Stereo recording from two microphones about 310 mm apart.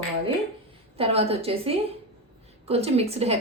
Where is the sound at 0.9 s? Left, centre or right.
Centre.